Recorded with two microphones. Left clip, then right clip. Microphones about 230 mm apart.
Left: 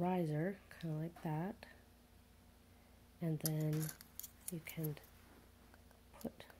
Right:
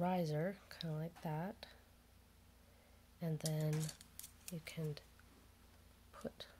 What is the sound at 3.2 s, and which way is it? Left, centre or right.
Speech, centre.